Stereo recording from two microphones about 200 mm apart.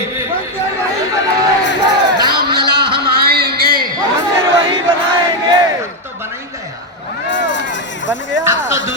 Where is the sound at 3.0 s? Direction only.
50° right (ahead or behind).